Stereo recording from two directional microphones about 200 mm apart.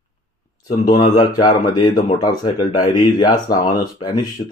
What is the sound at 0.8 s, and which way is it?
Speech, 20° left (ahead or behind).